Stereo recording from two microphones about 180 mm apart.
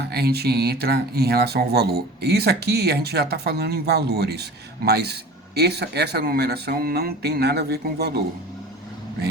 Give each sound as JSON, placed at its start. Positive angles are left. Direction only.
{"t": 0.0, "sound": "speech", "side_deg": -60}